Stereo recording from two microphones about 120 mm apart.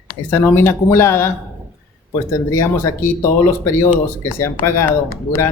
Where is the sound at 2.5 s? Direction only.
25° left (ahead or behind).